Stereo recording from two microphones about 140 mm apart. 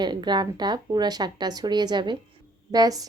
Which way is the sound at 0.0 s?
30° right (ahead or behind).